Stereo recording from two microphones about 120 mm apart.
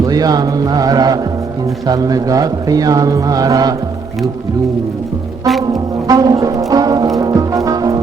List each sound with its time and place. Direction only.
0.0 s speech: 30° right (ahead or behind)
5.7 s music: 30° right (ahead or behind)